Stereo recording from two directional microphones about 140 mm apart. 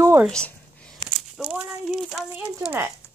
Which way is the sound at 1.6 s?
5° right (ahead or behind).